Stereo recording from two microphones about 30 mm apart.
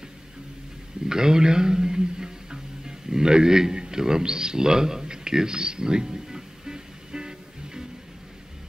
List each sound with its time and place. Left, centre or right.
1.0 s music: right